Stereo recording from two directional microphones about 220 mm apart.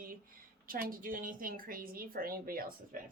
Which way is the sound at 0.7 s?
40° right (ahead or behind).